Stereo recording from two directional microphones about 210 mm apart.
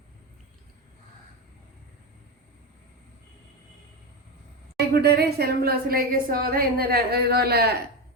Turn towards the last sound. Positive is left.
turn(degrees=-50)  # may be behind; listen again after turning